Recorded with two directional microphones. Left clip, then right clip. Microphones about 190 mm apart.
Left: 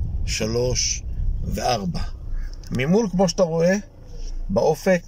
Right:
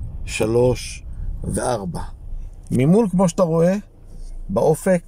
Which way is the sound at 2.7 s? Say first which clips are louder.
Right 3 dB; 25° right (ahead or behind).